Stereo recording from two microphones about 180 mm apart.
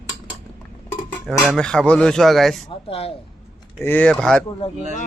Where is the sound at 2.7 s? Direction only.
35° left (ahead or behind).